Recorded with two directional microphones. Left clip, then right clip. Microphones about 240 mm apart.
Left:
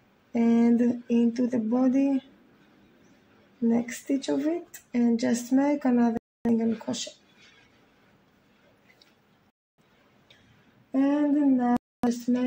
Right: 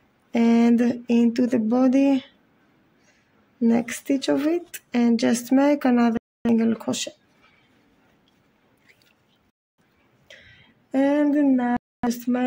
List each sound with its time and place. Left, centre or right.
0.3 s speech: right
3.6 s speech: right
10.9 s speech: right